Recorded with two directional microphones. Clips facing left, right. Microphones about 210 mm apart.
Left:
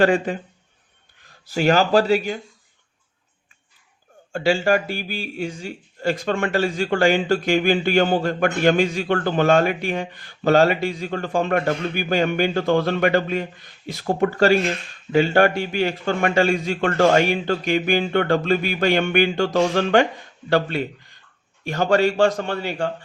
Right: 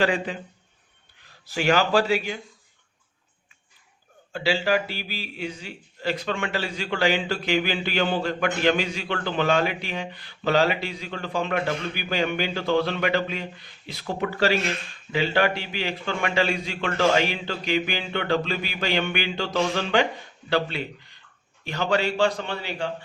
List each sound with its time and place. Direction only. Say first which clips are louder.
0.0 s a man's voice: left 6 dB; 50° left (ahead or behind)
1.5 s speech: left 4 dB; 40° left (ahead or behind)
4.3 s a man's voice: left 5 dB; 45° left (ahead or behind)